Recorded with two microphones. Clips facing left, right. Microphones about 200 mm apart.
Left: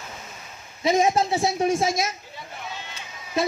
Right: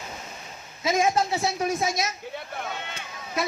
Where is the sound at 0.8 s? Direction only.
25° left (ahead or behind).